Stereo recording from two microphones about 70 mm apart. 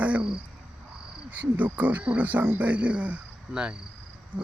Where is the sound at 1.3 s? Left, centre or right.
Right.